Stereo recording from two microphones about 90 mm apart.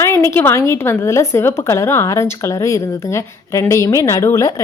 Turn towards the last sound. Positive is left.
turn(degrees=40)  # may be behind; listen again after turning